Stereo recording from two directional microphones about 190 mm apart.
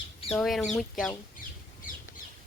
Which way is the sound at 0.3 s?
Centre (ahead or behind).